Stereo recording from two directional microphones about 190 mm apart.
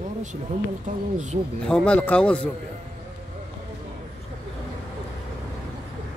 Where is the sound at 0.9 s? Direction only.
40° right (ahead or behind).